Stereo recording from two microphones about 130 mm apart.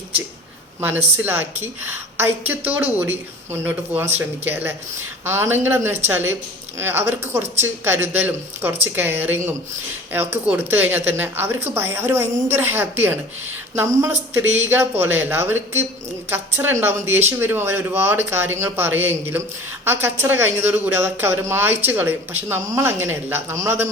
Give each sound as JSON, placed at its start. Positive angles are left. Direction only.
{"t": 0.8, "sound": "a woman's voice", "side_deg": -15}